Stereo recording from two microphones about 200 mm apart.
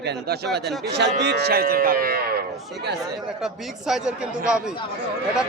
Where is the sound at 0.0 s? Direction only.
55° right (ahead or behind).